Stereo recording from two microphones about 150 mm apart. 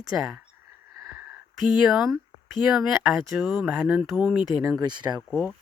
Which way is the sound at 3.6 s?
10° right (ahead or behind).